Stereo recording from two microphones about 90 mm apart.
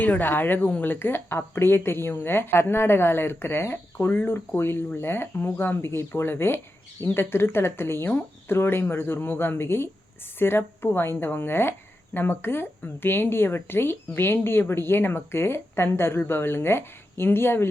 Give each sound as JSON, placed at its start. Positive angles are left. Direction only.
{"t": 0.0, "sound": "a woman's voice", "side_deg": 20}